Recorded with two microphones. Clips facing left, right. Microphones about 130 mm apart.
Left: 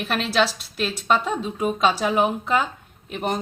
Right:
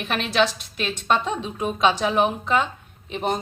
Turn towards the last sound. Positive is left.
turn(degrees=5)  # may be behind; listen again after turning